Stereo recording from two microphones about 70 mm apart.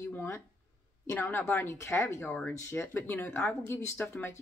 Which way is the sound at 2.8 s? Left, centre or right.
Left.